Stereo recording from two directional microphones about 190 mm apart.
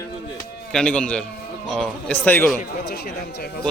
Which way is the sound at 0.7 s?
5° left (ahead or behind).